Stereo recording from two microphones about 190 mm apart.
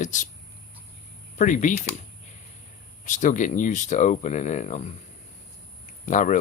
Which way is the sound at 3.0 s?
40° left (ahead or behind).